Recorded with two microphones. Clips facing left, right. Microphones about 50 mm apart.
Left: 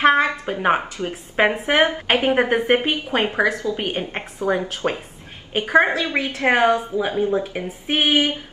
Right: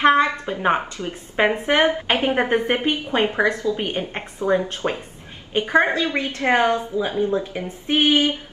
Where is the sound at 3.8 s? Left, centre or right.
Centre.